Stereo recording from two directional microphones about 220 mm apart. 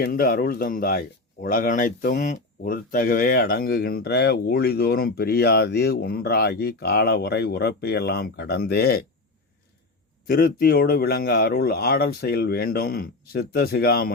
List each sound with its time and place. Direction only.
0.0 s speech: 45° left (ahead or behind)
10.2 s speech: 45° left (ahead or behind)